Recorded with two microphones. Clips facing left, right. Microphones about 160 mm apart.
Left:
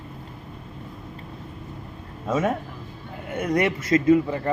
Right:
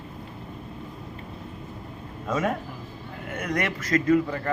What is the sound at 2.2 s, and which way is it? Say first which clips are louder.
Speech: left 3 dB; 5° left (ahead or behind).